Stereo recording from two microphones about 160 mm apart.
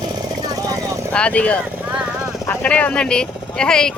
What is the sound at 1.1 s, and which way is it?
Speech, 10° left (ahead or behind).